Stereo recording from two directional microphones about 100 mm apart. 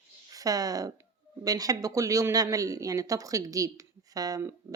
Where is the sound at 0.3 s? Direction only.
35° right (ahead or behind).